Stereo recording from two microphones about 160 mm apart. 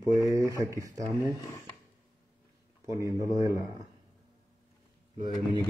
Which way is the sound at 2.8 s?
20° right (ahead or behind).